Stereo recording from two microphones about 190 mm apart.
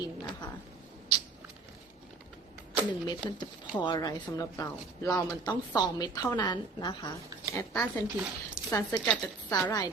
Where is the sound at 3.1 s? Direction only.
25° left (ahead or behind).